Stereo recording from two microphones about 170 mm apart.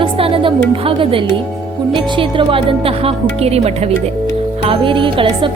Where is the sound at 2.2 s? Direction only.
30° right (ahead or behind).